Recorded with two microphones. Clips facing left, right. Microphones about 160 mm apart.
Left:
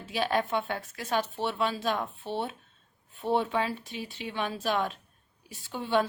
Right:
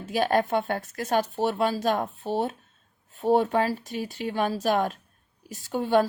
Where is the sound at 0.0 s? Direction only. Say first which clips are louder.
Right 5 dB; 45° right (ahead or behind).